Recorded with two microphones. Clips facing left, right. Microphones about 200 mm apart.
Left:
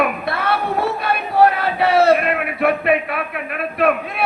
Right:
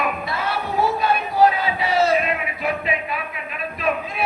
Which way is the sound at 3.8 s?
65° left (ahead or behind).